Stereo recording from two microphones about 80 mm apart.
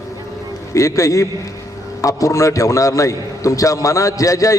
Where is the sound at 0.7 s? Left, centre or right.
Left.